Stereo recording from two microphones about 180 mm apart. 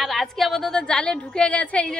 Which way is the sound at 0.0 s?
Centre (ahead or behind).